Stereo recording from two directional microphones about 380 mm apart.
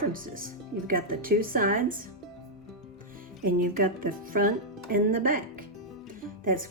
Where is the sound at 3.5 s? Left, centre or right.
Right.